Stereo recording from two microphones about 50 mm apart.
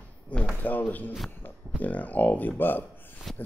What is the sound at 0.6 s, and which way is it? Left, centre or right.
Speech, left.